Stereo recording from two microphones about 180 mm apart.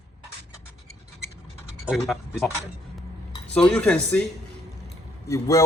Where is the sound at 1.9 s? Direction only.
Centre (ahead or behind).